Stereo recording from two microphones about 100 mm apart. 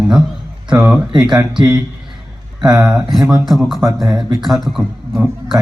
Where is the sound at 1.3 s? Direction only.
50° right (ahead or behind).